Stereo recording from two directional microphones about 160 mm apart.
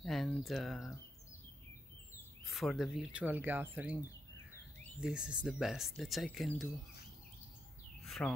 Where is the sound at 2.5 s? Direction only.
Centre (ahead or behind).